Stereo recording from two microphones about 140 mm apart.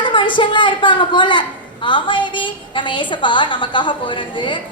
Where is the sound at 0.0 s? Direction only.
35° left (ahead or behind).